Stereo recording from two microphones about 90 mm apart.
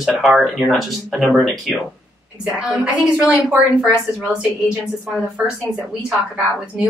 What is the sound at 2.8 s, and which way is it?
Speech, 10° right (ahead or behind).